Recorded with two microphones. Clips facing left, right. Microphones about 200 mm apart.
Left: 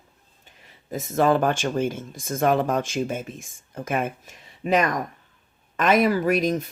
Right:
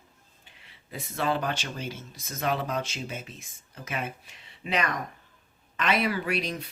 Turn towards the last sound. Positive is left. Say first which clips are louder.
# left 9 dB
turn(degrees=45)  # may be behind; listen again after turning